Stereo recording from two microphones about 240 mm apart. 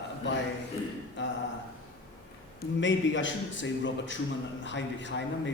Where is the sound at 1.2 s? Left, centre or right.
Left.